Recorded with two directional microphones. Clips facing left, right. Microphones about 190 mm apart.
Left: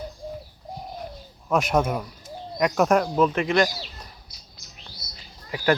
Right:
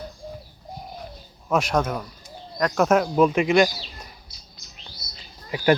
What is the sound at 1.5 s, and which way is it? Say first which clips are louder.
Speech: even; centre (ahead or behind).